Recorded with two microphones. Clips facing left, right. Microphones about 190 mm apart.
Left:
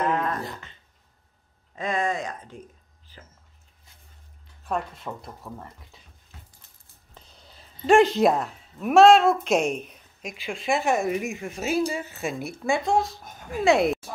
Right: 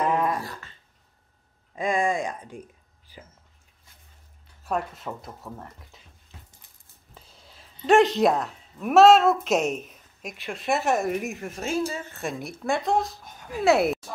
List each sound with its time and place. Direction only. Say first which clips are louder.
0.0 s dog: right 1 dB; 10° right (ahead or behind)
0.4 s a sound: left 1 dB; 20° left (ahead or behind)
1.8 s speech: right 2 dB; 10° right (ahead or behind)
3.1 s a sound: right 3 dB; 10° right (ahead or behind)
4.6 s a woman's voice: right 1 dB; 5° right (ahead or behind)
7.2 s a woman's voice: even; 5° right (ahead or behind)